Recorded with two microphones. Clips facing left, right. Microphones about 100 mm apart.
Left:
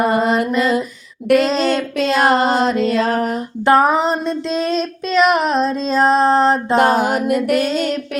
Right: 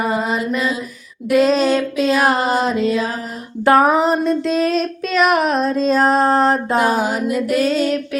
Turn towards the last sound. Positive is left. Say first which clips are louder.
# left 2 dB
turn(degrees=60)  # may be behind; listen again after turning